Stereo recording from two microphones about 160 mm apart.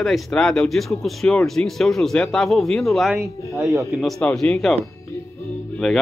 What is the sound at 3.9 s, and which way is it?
Speech, centre (ahead or behind).